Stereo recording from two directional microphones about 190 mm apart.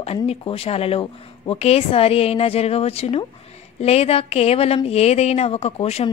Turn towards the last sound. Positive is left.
turn(degrees=35)  # may be behind; listen again after turning